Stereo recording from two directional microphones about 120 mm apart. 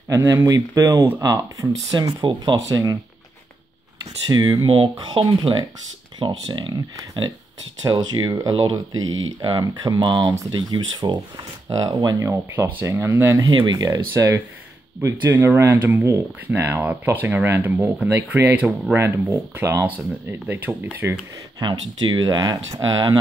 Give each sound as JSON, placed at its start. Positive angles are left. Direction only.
{"t": 0.1, "sound": "speech", "side_deg": -25}
{"t": 1.2, "sound": "speech", "side_deg": -30}
{"t": 4.0, "sound": "speech", "side_deg": -35}
{"t": 7.8, "sound": "speech", "side_deg": -35}
{"t": 21.6, "sound": "speech", "side_deg": -40}